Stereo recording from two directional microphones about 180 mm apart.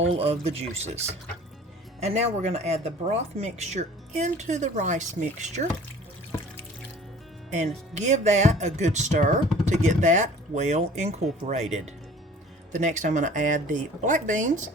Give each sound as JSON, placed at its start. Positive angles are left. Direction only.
{"t": 0.1, "sound": "speech", "side_deg": -35}
{"t": 7.5, "sound": "speech", "side_deg": -40}
{"t": 12.7, "sound": "speech", "side_deg": -40}